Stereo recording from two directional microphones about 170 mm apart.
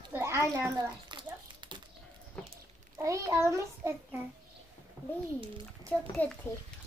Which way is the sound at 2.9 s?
15° right (ahead or behind).